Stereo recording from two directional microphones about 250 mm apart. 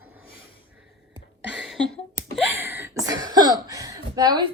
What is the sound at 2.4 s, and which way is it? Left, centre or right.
Speech, centre.